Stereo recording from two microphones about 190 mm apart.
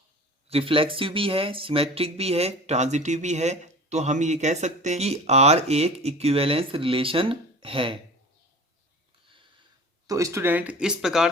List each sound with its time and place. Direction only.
0.4 s speech: 30° right (ahead or behind)
10.1 s speech: 15° right (ahead or behind)